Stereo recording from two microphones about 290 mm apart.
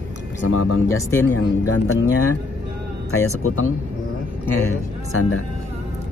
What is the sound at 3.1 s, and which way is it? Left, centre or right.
Speech, left.